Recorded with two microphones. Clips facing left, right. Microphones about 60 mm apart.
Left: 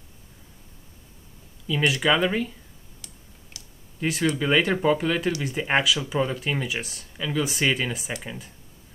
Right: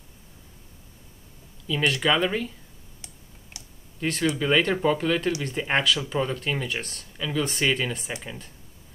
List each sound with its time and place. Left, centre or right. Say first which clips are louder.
1.7 s speech: left 1 dB; centre
3.6 s computer keyboard: right 1 dB; right
4.0 s speech: left 1 dB; centre